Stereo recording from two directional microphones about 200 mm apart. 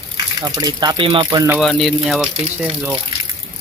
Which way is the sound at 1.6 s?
Centre (ahead or behind).